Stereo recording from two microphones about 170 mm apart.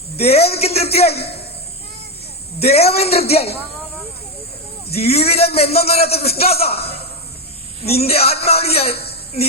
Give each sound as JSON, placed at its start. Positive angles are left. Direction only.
{"t": 0.2, "sound": "a man's voice", "side_deg": 35}
{"t": 2.6, "sound": "a man's voice", "side_deg": 35}
{"t": 4.9, "sound": "a man's voice", "side_deg": 35}